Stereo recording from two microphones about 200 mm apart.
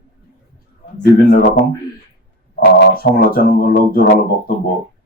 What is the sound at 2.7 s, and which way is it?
Speech, 50° left (ahead or behind).